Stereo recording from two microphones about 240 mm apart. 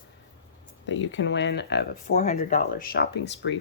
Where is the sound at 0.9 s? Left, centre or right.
Left.